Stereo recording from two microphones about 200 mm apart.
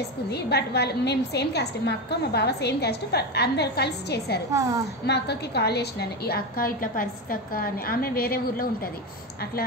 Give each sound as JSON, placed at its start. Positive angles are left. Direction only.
{"t": 0.3, "sound": "a woman's voice", "side_deg": 55}
{"t": 4.5, "sound": "a woman's voice", "side_deg": -15}
{"t": 5.0, "sound": "a woman's voice", "side_deg": 55}